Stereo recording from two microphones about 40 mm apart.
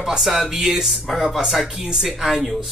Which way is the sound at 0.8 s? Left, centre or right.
Centre.